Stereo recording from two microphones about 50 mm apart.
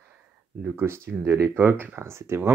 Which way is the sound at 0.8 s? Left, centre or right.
Right.